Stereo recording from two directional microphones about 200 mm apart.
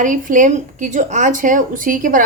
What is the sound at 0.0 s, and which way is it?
A woman's voice, 40° right (ahead or behind).